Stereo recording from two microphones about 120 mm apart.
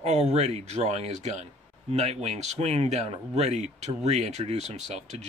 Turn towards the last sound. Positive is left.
turn(degrees=-65)  # may be behind; listen again after turning